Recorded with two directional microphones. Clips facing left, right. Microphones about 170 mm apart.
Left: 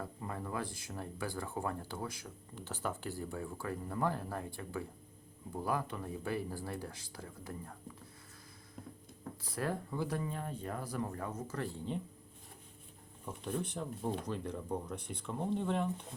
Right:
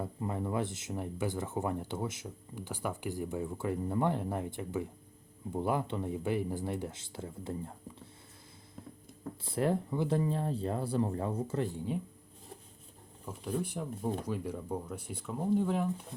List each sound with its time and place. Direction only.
0.0 s speech: 20° right (ahead or behind)
9.4 s speech: 25° right (ahead or behind)
13.2 s speech: 5° right (ahead or behind)